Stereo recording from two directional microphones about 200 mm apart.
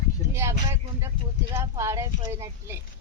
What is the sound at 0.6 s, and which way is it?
Speech, 15° right (ahead or behind).